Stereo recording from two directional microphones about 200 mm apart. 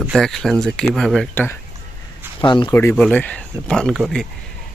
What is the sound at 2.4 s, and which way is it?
Speech, 25° left (ahead or behind).